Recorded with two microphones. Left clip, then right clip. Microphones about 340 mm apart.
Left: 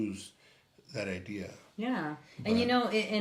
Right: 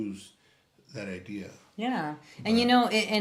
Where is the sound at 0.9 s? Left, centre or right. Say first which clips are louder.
Left 1 dB; left.